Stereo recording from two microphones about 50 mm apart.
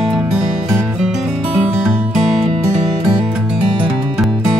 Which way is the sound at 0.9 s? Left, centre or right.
Centre.